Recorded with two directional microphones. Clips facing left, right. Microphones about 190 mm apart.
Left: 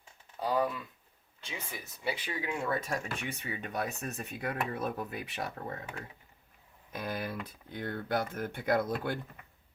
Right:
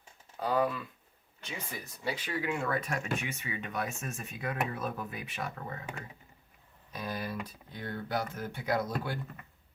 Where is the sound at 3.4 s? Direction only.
40° left (ahead or behind).